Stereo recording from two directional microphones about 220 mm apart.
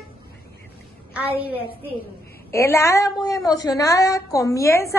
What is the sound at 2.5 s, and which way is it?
A woman's voice, 10° left (ahead or behind).